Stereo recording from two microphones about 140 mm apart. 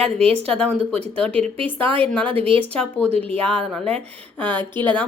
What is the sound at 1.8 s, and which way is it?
Speech, 40° right (ahead or behind).